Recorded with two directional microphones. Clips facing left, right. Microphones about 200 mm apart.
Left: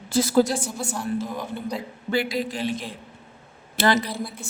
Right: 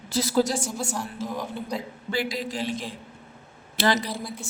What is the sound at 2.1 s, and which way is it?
Speech, 55° left (ahead or behind).